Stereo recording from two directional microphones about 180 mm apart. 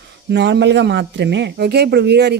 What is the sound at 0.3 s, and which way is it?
A man's voice, 70° right (ahead or behind).